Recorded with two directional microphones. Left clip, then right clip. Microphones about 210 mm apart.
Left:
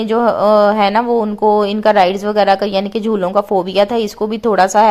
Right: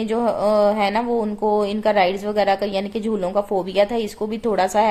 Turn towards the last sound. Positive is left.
turn(degrees=25)  # may be behind; listen again after turning